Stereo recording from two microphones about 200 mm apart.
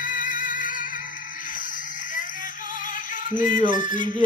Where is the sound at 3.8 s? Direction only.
40° left (ahead or behind).